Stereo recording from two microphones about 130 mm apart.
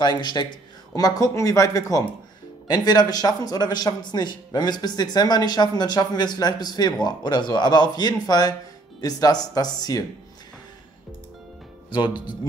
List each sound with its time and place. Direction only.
0.0 s a man's voice: 35° left (ahead or behind)
11.9 s a man's voice: 35° left (ahead or behind)